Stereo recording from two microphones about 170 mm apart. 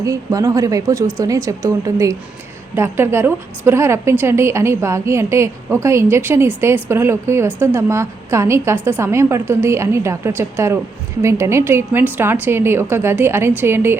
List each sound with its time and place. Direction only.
0.0 s a woman's voice: 20° right (ahead or behind)